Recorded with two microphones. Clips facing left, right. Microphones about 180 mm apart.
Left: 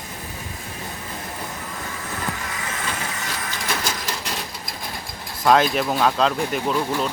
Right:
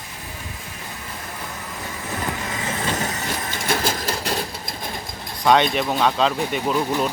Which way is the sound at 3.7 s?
30° right (ahead or behind).